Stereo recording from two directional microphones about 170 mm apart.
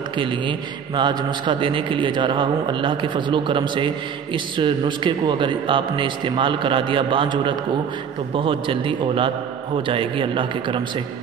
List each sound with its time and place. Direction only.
0.2 s a man's voice: 30° right (ahead or behind)